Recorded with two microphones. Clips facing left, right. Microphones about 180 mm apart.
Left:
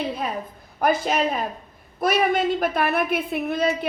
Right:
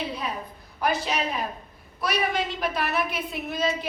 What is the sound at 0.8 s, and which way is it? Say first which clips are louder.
A woman's voice: left 5 dB; 50° left (ahead or behind).